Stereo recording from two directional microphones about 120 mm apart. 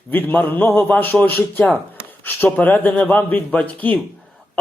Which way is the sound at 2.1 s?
15° left (ahead or behind).